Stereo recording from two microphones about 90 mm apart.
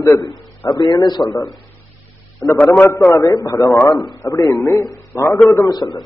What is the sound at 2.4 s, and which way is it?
A man's voice, 35° left (ahead or behind).